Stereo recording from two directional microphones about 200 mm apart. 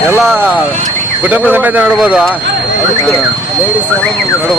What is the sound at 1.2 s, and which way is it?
Speech, 10° right (ahead or behind).